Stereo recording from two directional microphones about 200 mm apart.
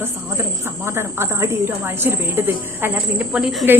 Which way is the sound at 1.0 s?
10° right (ahead or behind).